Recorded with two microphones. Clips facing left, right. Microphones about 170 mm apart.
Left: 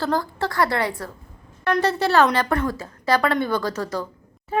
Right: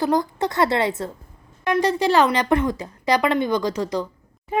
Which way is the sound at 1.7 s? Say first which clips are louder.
Right 1 dB; 10° right (ahead or behind).